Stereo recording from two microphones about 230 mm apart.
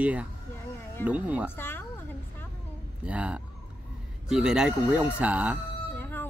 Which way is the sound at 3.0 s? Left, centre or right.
Centre.